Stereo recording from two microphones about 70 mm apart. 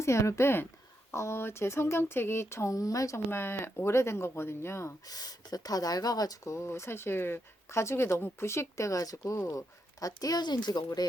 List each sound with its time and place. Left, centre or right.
0.0 s speech: left
3.2 s speech: left
5.0 s speech: left
6.4 s speech: left
10.8 s speech: left